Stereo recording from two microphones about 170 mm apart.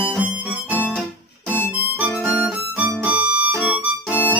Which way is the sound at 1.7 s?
10° right (ahead or behind).